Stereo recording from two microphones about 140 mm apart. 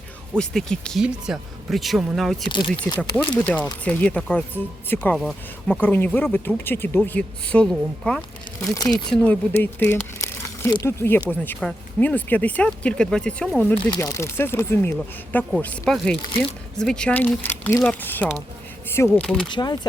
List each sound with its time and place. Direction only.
0.3 s speech: 5° left (ahead or behind)
2.5 s speech: 35° left (ahead or behind)
3.0 s speech: 10° left (ahead or behind)
14.0 s speech: 20° left (ahead or behind)
19.5 s speech: 30° left (ahead or behind)